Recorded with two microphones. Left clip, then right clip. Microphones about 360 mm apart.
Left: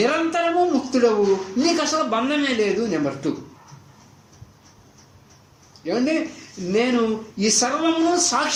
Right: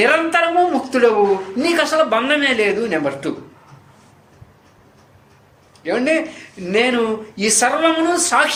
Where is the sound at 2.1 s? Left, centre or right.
Right.